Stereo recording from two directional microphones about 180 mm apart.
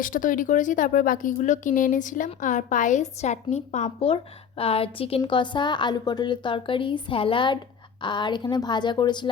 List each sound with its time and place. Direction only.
0.0 s a woman's voice: 50° left (ahead or behind); by 9.3 s 25° left (ahead or behind)